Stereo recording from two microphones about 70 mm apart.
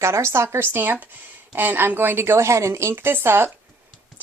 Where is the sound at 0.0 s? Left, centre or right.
Right.